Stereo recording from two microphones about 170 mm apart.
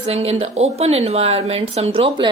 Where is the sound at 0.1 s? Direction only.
35° right (ahead or behind).